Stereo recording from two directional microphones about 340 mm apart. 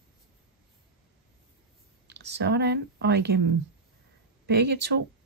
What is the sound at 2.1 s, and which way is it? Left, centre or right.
Speech, right.